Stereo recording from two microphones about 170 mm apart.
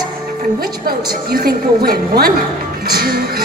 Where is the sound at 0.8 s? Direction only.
60° right (ahead or behind).